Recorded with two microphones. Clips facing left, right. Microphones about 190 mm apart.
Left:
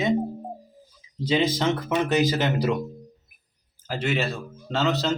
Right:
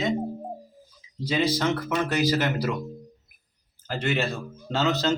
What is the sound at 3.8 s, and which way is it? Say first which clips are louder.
Speech: left 1 dB; centre (ahead or behind).